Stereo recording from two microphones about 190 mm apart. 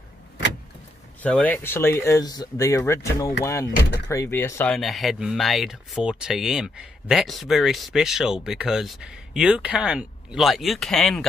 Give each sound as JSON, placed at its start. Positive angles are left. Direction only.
{"t": 1.2, "sound": "speech", "side_deg": 10}
{"t": 4.7, "sound": "speech", "side_deg": 0}